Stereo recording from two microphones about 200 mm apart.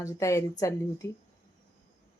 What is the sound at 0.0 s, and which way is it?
Speech, 15° left (ahead or behind).